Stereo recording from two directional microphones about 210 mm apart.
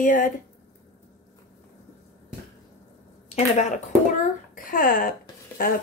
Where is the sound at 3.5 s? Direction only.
35° left (ahead or behind).